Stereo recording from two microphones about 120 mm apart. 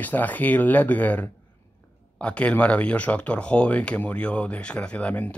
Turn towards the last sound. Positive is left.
turn(degrees=10)  # may be behind; listen again after turning